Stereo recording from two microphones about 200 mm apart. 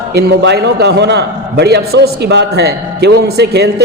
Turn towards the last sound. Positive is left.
turn(degrees=-55)  # may be behind; listen again after turning